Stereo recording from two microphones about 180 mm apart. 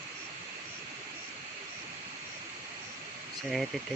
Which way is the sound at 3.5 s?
Centre (ahead or behind).